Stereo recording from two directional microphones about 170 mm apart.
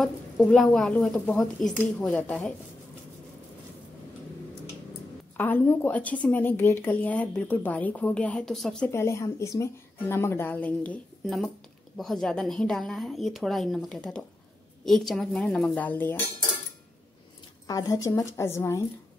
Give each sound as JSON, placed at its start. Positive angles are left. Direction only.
{"t": 0.0, "sound": "speech", "side_deg": 5}
{"t": 5.4, "sound": "a woman's voice", "side_deg": 10}
{"t": 8.9, "sound": "a woman's voice", "side_deg": 15}
{"t": 17.6, "sound": "a woman's voice", "side_deg": 20}